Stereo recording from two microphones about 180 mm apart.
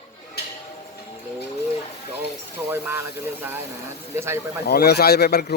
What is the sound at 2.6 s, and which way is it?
Speech, 15° right (ahead or behind).